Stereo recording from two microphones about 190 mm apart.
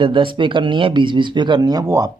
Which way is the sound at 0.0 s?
25° right (ahead or behind).